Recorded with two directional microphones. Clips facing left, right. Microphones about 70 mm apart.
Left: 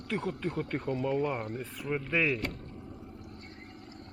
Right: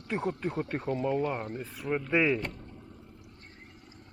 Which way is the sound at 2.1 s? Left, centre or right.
Right.